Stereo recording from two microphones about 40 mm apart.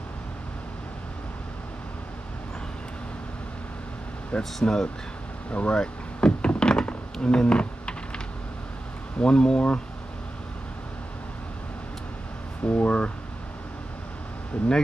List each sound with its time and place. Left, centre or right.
4.4 s speech: centre
5.5 s speech: left
5.8 s door: left
6.9 s computer keyboard: left
9.2 s speech: centre
12.6 s speech: left